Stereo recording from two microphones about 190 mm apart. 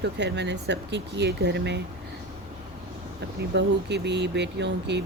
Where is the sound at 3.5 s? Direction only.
65° right (ahead or behind).